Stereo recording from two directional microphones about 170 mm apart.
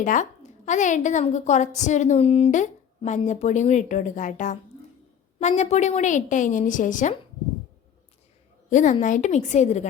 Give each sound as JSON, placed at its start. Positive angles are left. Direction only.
{"t": 0.0, "sound": "a woman's voice", "side_deg": 50}
{"t": 8.7, "sound": "a woman's voice", "side_deg": 45}